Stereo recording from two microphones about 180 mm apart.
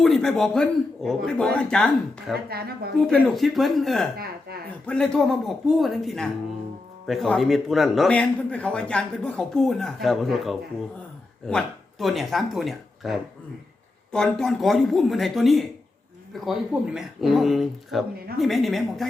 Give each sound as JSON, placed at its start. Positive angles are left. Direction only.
{"t": 0.0, "sound": "a man's voice", "side_deg": 0}
{"t": 2.5, "sound": "speech", "side_deg": -60}
{"t": 3.1, "sound": "a man's voice", "side_deg": 0}